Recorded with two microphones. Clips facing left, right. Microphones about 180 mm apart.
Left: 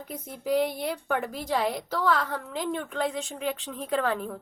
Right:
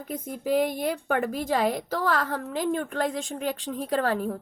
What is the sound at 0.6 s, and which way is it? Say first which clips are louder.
A woman's voice: right 2 dB; 50° right (ahead or behind).